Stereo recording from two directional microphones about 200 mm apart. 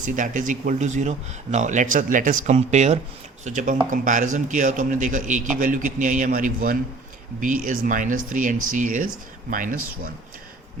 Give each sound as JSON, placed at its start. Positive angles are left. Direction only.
{"t": 0.0, "sound": "speech", "side_deg": -40}